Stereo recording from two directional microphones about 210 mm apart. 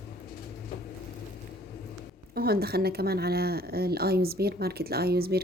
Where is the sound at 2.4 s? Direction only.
50° right (ahead or behind).